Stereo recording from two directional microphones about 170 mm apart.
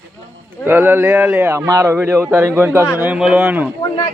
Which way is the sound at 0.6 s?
10° right (ahead or behind).